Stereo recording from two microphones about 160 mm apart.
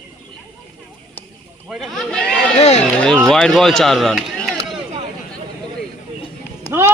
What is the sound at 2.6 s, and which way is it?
Run, 45° left (ahead or behind).